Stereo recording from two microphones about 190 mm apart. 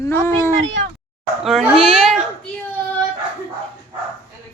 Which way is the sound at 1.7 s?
30° right (ahead or behind).